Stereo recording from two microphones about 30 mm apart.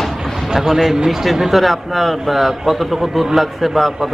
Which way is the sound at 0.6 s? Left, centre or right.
Centre.